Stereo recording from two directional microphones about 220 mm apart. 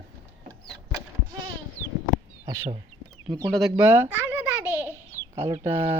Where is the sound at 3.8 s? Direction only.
10° right (ahead or behind).